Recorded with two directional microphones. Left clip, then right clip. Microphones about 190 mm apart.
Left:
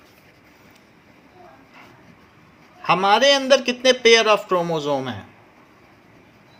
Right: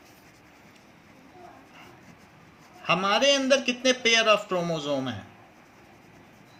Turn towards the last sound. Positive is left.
turn(degrees=45)  # may be behind; listen again after turning